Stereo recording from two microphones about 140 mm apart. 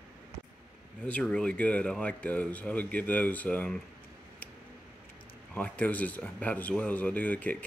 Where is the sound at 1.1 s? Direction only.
10° left (ahead or behind).